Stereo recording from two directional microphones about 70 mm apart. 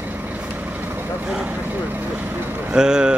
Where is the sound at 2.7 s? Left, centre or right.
Centre.